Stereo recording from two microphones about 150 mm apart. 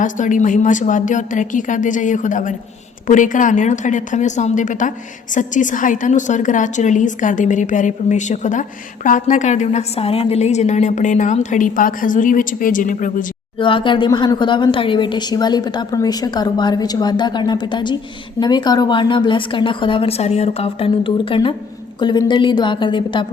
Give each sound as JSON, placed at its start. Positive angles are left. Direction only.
{"t": 0.0, "sound": "a woman's voice", "side_deg": 60}
{"t": 13.6, "sound": "a woman's voice", "side_deg": 35}